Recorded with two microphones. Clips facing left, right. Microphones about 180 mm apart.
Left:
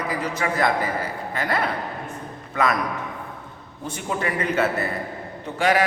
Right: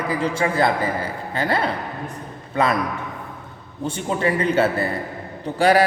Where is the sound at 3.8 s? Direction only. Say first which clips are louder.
Right 5 dB; 30° right (ahead or behind).